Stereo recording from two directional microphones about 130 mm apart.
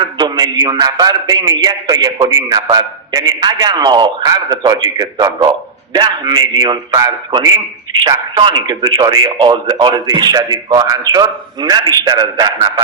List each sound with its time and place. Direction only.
0.2 s a man's voice: 30° right (ahead or behind)